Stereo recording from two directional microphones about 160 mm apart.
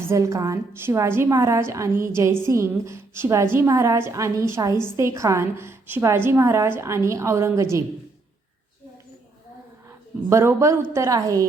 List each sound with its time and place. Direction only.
0.1 s a woman's voice: 20° right (ahead or behind)
10.2 s a woman's voice: 15° right (ahead or behind)